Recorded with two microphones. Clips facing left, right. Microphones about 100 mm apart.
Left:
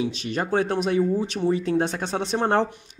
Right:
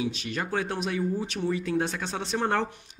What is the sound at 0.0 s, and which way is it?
Speech, 30° left (ahead or behind).